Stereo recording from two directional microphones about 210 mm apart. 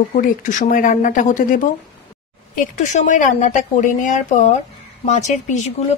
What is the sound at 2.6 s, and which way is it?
A woman's voice, 35° left (ahead or behind).